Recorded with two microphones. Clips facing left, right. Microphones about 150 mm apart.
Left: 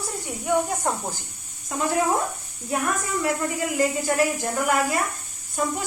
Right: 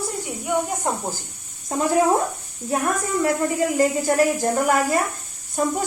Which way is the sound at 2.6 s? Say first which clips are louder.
Right 3 dB; 35° right (ahead or behind).